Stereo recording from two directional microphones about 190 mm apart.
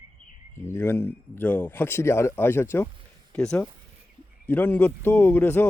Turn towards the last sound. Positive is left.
turn(degrees=10)  # may be behind; listen again after turning